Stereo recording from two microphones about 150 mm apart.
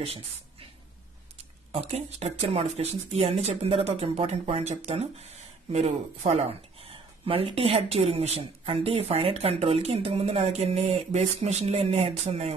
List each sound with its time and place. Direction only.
0.0 s a woman's voice: 40° right (ahead or behind)
1.7 s speech: 45° right (ahead or behind)